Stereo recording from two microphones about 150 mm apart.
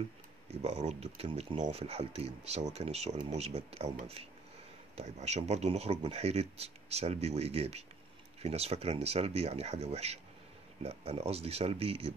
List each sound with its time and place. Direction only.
0.5 s speech: 45° right (ahead or behind)
4.9 s speech: 45° right (ahead or behind)